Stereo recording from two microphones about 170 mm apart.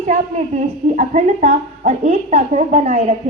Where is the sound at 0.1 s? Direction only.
40° right (ahead or behind).